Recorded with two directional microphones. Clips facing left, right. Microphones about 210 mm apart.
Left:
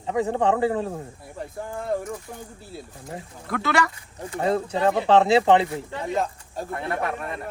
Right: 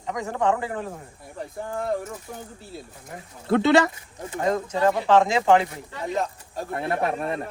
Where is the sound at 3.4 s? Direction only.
25° right (ahead or behind).